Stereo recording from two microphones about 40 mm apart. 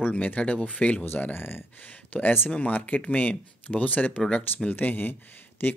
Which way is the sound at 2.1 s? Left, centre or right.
Left.